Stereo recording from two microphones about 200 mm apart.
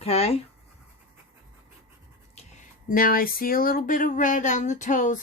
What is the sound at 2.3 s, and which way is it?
Speech, 35° left (ahead or behind).